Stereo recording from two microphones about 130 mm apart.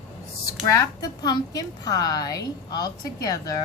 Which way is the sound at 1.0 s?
30° left (ahead or behind).